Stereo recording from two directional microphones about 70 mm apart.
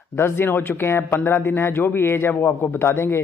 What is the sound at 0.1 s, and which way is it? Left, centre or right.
Speech, left.